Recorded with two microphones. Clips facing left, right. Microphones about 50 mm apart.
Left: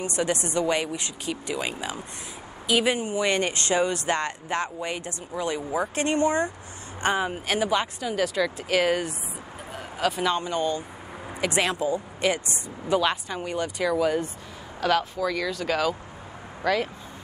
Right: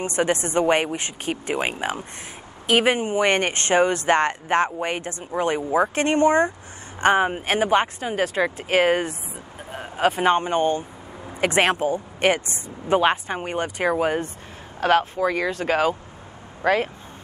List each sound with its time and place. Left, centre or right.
0.0 s speech: right
12.8 s speech: right